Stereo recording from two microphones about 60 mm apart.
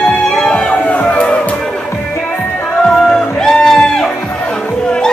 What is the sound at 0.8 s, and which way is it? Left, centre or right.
Music, left.